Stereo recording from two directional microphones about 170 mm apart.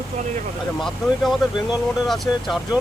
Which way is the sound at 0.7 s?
Centre (ahead or behind).